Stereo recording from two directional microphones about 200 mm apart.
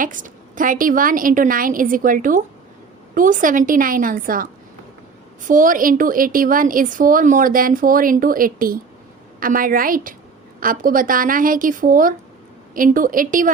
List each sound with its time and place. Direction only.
0.0 s a woman's voice: 40° right (ahead or behind)